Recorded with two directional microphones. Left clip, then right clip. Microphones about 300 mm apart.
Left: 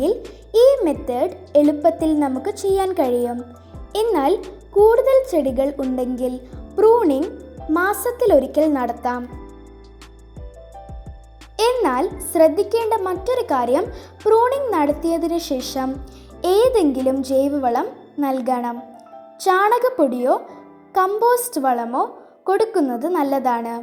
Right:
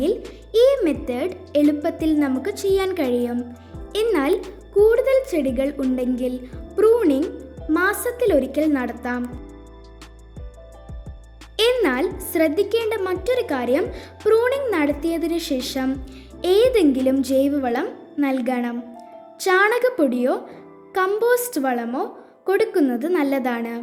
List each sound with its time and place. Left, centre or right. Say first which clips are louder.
0.0 s music: left 2 dB; centre
0.9 s a child's voice: left 3 dB; centre
9.0 s a woman's voice: left 4 dB; centre
11.5 s a child's voice: left 1 dB; centre